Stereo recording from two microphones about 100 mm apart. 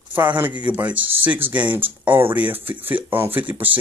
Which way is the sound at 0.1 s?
20° right (ahead or behind).